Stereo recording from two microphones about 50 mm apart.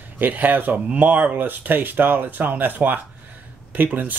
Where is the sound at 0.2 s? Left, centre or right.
Right.